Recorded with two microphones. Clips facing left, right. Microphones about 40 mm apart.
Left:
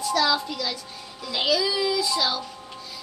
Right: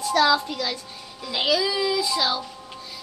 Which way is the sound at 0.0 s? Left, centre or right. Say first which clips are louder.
Right 3 dB; right.